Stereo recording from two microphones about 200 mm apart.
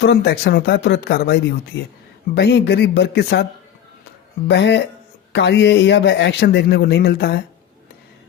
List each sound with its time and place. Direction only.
0.0 s speech: 55° left (ahead or behind)
4.4 s speech: 60° left (ahead or behind)